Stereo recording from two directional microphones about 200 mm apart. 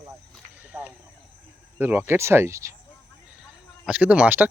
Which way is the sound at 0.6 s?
5° right (ahead or behind).